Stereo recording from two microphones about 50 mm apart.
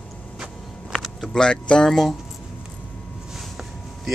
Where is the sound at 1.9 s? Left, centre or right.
Centre.